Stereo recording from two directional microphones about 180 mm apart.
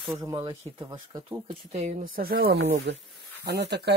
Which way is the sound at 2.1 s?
55° right (ahead or behind).